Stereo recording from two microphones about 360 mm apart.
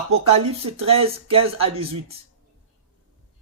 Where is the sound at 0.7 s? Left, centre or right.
Centre.